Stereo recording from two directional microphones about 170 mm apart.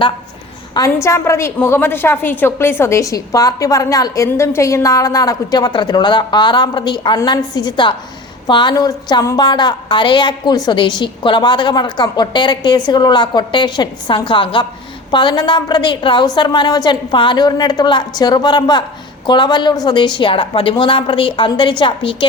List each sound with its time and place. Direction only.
0.7 s a woman's voice: 20° left (ahead or behind)